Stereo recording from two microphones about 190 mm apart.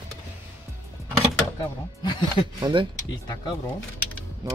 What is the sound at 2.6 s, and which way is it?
Speech, 20° right (ahead or behind).